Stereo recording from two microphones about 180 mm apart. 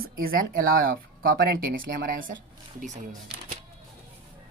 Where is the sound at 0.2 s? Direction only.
55° right (ahead or behind).